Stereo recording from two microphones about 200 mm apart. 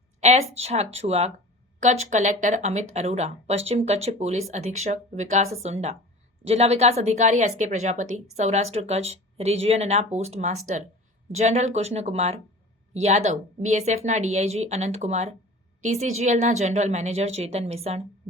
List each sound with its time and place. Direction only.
0.5 s speech: 30° right (ahead or behind)